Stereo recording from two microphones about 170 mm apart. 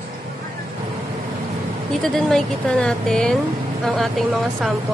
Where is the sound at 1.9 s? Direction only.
Centre (ahead or behind).